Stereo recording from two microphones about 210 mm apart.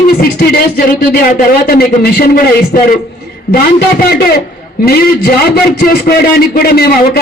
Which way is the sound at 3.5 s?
45° left (ahead or behind).